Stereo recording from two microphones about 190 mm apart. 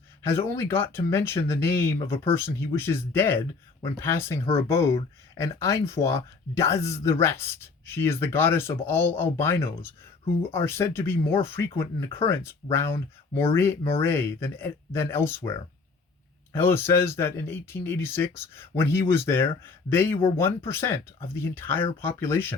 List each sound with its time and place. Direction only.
0.3 s speech: 15° left (ahead or behind)
4.4 s speech: 35° left (ahead or behind)
4.7 s speech: 15° left (ahead or behind)
16.5 s speech: 10° left (ahead or behind)